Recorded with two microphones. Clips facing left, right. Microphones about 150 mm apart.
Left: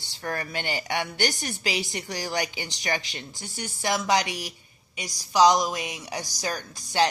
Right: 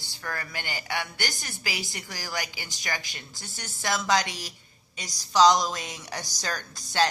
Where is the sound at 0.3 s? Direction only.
25° left (ahead or behind).